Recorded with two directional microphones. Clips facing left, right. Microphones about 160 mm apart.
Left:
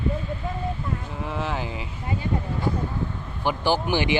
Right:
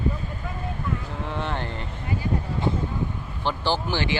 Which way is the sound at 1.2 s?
Centre (ahead or behind).